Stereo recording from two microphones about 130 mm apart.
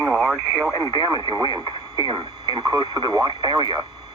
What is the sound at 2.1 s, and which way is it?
Speech, 35° right (ahead or behind).